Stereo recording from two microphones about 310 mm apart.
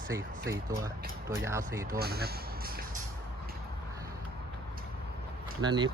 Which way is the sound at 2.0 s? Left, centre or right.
Right.